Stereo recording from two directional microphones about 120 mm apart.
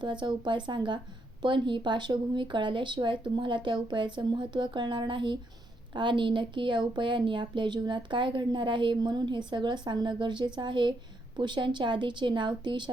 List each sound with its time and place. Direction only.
0.0 s speech: 40° right (ahead or behind)